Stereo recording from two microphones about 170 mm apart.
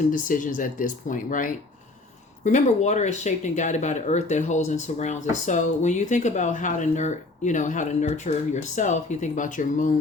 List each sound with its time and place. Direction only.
0.1 s speech: 50° left (ahead or behind)